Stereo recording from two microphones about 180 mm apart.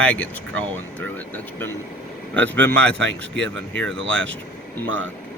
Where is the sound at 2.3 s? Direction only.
10° left (ahead or behind).